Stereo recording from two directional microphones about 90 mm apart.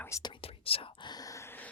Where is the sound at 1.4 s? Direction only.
20° left (ahead or behind).